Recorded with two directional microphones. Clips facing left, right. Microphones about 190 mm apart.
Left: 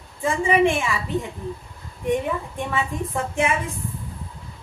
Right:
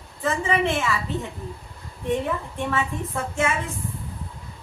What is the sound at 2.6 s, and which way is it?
Speech, 15° left (ahead or behind).